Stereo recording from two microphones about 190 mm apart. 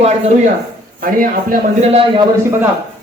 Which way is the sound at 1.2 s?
45° right (ahead or behind).